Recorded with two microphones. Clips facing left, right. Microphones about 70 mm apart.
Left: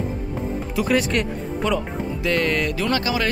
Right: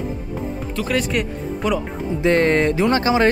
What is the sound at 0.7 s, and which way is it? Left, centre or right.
Speech, centre.